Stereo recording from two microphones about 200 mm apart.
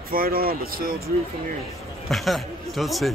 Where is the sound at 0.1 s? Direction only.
45° right (ahead or behind).